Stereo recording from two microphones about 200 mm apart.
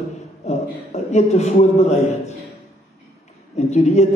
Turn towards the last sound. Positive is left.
turn(degrees=35)  # may be behind; listen again after turning